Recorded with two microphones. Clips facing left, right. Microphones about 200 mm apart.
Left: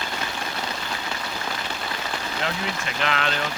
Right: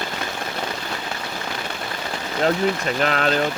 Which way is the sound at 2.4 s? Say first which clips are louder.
Right 12 dB; 40° right (ahead or behind).